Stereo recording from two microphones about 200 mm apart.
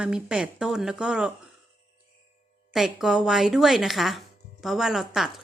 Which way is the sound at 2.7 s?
Centre (ahead or behind).